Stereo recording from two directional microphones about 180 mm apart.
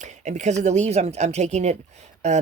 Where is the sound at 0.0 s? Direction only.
40° right (ahead or behind).